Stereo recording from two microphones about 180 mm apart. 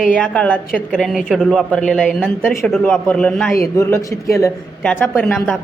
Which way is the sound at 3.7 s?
15° left (ahead or behind).